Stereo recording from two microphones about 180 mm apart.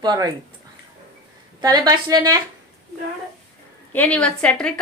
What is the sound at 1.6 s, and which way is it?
Speech, 20° right (ahead or behind).